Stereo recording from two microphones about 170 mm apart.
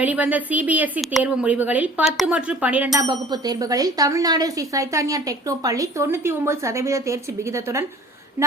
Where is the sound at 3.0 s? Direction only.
25° right (ahead or behind).